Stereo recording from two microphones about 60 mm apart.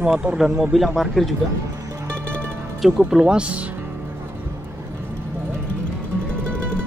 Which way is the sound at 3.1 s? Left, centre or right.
Centre.